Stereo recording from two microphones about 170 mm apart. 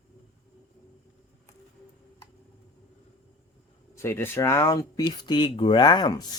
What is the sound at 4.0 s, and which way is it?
Speech, 15° left (ahead or behind).